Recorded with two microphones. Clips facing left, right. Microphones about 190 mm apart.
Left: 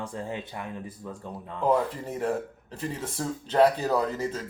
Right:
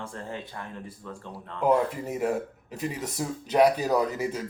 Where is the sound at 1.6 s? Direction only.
10° right (ahead or behind).